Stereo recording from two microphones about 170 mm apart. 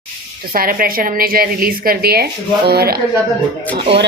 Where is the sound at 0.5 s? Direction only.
60° right (ahead or behind).